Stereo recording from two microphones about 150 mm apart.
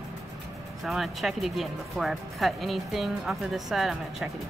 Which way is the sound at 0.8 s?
Centre (ahead or behind).